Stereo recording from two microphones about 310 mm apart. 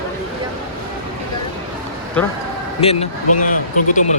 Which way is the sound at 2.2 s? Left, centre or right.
Centre.